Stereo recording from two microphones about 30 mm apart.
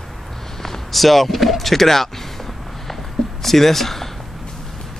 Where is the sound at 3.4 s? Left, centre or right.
Centre.